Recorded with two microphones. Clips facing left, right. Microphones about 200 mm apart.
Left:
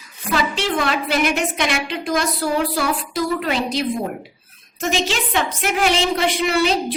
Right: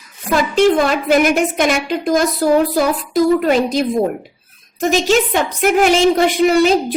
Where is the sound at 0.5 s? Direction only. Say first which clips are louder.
Right 9 dB; 45° right (ahead or behind).